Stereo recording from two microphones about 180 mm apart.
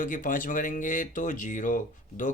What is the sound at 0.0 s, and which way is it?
Speech, 45° left (ahead or behind).